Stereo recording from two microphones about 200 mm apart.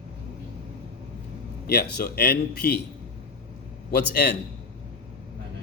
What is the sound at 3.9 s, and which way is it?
Speech, 55° left (ahead or behind).